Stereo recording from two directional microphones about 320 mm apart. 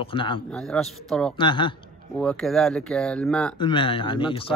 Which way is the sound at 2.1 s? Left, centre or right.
Centre.